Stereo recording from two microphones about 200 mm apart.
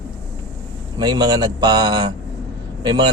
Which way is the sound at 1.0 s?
20° right (ahead or behind).